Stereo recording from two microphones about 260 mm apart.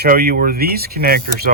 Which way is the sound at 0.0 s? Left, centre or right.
Right.